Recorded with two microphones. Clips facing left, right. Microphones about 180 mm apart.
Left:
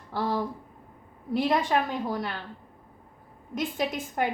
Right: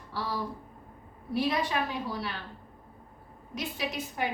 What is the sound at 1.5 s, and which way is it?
Speech, 50° left (ahead or behind).